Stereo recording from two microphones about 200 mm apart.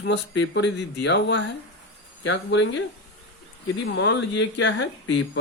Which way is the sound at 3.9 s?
60° left (ahead or behind).